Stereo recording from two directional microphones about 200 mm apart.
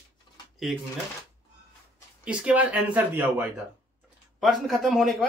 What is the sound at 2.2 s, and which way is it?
Speech, 5° right (ahead or behind).